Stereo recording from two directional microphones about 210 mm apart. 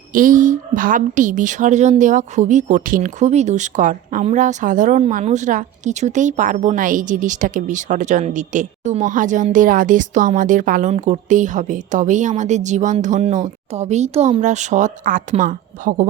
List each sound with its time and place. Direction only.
0.1 s a woman's voice: 40° right (ahead or behind)